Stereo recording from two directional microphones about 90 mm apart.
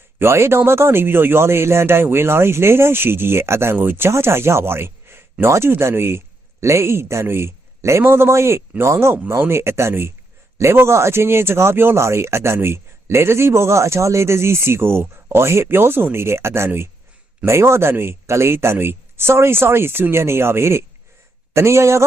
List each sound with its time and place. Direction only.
0.2 s a man's voice: 30° right (ahead or behind)